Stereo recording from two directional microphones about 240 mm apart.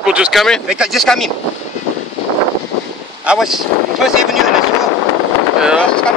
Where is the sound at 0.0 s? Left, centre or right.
Centre.